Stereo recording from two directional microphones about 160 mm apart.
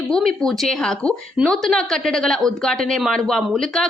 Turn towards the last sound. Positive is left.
turn(degrees=5)  # may be behind; listen again after turning